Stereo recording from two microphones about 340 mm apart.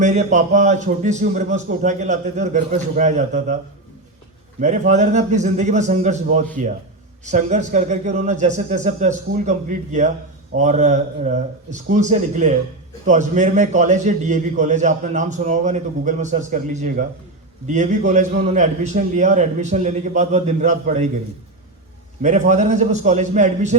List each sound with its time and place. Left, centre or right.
0.0 s a man's voice: centre
4.6 s a man's voice: right
22.2 s a man's voice: centre